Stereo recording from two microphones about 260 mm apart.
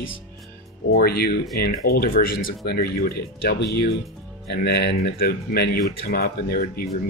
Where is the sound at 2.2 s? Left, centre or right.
Left.